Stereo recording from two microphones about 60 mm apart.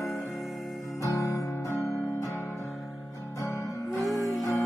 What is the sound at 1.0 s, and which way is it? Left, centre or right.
Guitar, left.